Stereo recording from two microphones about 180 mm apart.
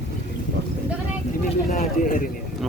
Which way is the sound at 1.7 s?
45° left (ahead or behind).